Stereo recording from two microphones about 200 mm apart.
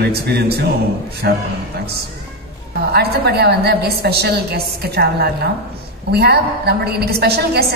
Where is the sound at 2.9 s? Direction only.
55° right (ahead or behind).